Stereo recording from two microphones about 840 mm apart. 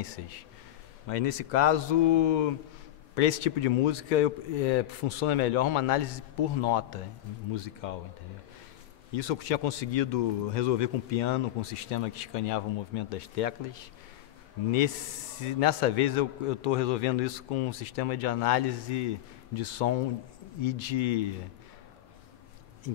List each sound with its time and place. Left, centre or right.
0.0 s a man's voice: left
1.0 s a man's voice: left
9.1 s speech: left
15.4 s a man's voice: left